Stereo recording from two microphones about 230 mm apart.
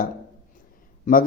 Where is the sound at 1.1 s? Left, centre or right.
Left.